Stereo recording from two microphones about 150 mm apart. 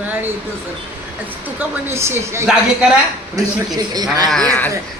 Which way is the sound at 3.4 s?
25° right (ahead or behind).